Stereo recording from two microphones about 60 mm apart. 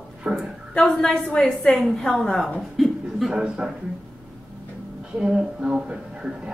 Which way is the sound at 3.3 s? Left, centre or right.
Centre.